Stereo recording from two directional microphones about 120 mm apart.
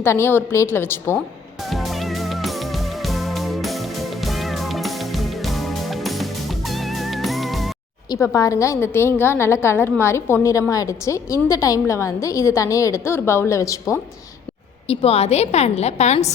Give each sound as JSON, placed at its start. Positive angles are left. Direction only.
{"t": 0.0, "sound": "a woman's voice", "side_deg": 20}
{"t": 1.7, "sound": "music", "side_deg": 0}
{"t": 8.1, "sound": "a woman's voice", "side_deg": 25}
{"t": 14.8, "sound": "a woman's voice", "side_deg": 55}